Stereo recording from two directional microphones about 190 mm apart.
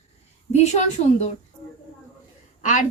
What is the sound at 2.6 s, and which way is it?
Speech, 40° left (ahead or behind).